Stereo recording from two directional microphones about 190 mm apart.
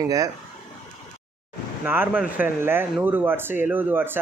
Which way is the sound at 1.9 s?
10° right (ahead or behind).